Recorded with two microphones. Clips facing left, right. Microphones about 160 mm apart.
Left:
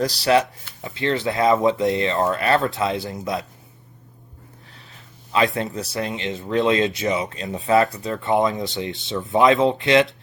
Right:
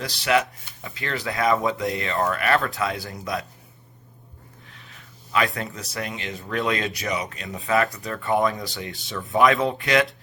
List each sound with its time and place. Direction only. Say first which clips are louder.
0.0 s speech: left 4 dB; 35° left (ahead or behind)
5.3 s speech: left 4 dB; 25° left (ahead or behind)